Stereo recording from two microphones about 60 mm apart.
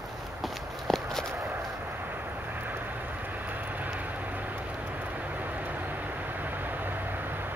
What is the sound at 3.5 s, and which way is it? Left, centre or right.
Vehicle, right.